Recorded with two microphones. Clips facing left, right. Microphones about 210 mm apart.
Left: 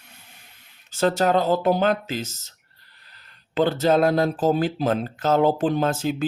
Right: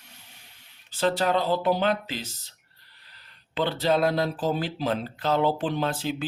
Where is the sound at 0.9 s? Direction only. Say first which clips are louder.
Left 4 dB; 45° left (ahead or behind).